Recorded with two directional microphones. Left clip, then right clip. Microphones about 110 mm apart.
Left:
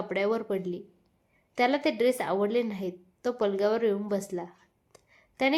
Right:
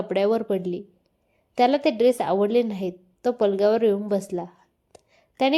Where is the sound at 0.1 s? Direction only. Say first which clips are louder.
Right 6 dB; 35° right (ahead or behind).